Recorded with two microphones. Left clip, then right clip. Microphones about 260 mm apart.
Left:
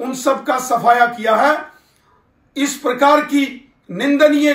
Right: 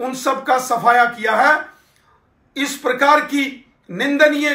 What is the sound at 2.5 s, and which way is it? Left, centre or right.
A man's voice, centre.